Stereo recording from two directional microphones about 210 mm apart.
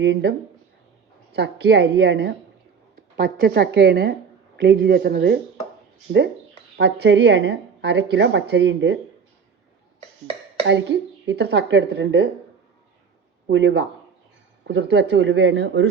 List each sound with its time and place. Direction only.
0.0 s a woman's voice: 55° right (ahead or behind)
10.7 s speech: 55° right (ahead or behind)
13.5 s speech: 55° right (ahead or behind)